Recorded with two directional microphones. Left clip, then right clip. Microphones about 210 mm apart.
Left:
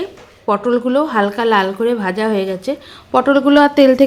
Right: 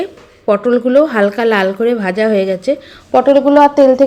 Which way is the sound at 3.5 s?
15° left (ahead or behind).